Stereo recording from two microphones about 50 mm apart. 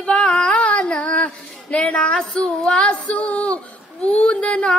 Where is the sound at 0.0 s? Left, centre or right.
Left.